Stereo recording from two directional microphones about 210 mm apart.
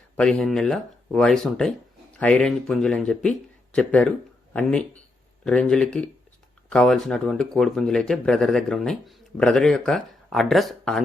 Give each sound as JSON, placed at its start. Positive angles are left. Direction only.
{"t": 0.2, "sound": "speech", "side_deg": 5}